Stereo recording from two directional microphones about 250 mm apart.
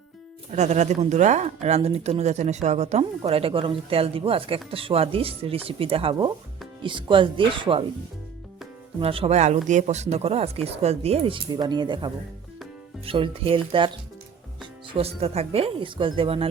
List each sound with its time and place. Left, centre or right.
0.5 s speech: right
9.0 s speech: right
14.9 s speech: right